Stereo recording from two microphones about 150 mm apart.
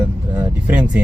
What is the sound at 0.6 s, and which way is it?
Speech, 10° right (ahead or behind).